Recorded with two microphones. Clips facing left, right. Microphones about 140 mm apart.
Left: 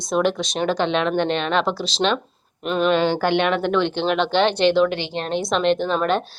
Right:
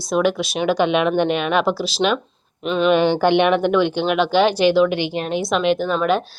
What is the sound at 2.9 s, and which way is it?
A woman's voice, 15° right (ahead or behind).